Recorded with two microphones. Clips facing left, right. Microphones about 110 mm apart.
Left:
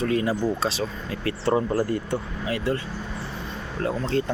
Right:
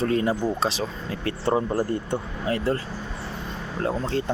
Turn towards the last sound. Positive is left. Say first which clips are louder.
# left 1 dB
turn(degrees=-25)  # may be behind; listen again after turning